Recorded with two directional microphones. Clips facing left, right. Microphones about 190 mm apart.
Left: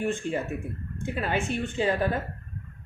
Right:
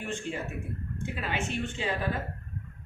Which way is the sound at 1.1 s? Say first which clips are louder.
Left 7 dB; 45° left (ahead or behind).